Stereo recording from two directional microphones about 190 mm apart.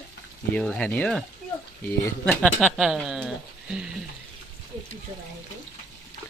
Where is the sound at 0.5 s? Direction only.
5° left (ahead or behind).